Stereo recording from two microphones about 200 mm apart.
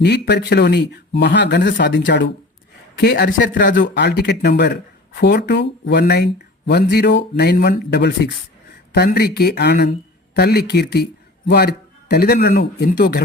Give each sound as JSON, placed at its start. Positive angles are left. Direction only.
{"t": 0.0, "sound": "speech", "side_deg": 55}
{"t": 3.0, "sound": "speech", "side_deg": 50}
{"t": 3.8, "sound": "speech", "side_deg": 60}